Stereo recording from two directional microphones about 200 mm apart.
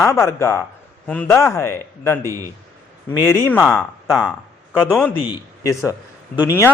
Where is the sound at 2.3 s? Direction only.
15° right (ahead or behind).